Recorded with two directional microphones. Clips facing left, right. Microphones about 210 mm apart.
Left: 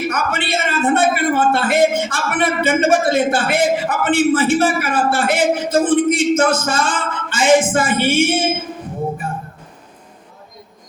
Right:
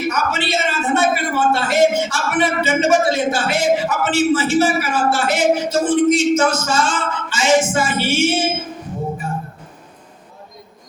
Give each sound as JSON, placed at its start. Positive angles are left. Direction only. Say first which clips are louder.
{"t": 0.1, "sound": "a man's voice", "louder": "even", "side_deg": 55}